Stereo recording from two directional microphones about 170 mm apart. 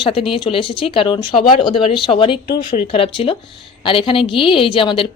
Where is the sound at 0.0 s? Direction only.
30° left (ahead or behind).